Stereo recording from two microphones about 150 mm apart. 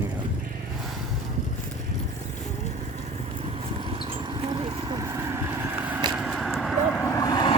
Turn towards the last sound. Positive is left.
turn(degrees=30)  # may be behind; listen again after turning